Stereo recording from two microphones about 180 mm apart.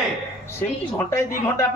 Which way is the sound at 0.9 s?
15° left (ahead or behind).